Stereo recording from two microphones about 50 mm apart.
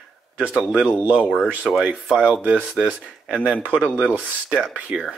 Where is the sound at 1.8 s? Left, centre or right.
Centre.